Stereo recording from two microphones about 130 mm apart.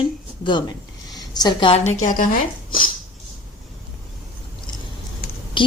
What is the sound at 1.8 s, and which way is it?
Speech, 65° left (ahead or behind).